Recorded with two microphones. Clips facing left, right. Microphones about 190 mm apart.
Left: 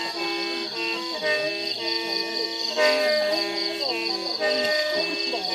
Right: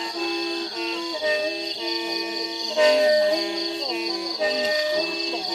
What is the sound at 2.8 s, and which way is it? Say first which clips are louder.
Music: right 4 dB; 30° right (ahead or behind).